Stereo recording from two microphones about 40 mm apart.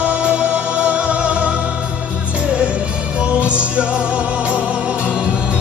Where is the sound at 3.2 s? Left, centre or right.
Right.